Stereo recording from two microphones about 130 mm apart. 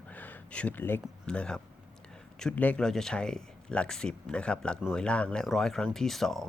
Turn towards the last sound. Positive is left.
turn(degrees=0)  # may be behind; listen again after turning